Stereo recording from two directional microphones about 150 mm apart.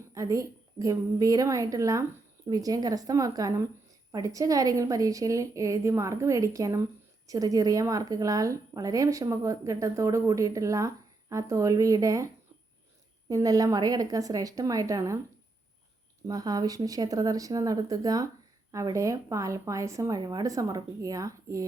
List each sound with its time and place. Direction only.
0.1 s a woman's voice: 20° right (ahead or behind)
16.2 s a woman's voice: 25° right (ahead or behind)